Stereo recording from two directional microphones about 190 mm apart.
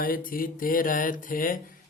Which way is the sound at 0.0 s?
50° left (ahead or behind).